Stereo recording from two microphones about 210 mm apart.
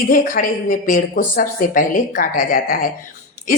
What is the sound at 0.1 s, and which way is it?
Speech, 40° left (ahead or behind).